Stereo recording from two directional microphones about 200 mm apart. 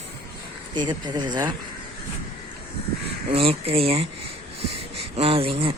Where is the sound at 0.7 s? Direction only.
20° right (ahead or behind).